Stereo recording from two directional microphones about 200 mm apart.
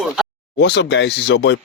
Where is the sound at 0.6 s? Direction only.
60° left (ahead or behind).